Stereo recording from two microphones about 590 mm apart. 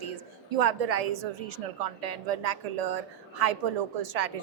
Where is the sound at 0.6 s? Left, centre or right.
Right.